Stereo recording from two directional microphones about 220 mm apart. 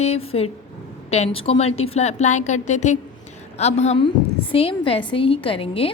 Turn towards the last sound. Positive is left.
turn(degrees=25)  # may be behind; listen again after turning